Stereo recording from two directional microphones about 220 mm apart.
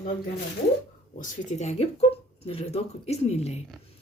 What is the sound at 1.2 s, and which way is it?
Speech, 30° left (ahead or behind).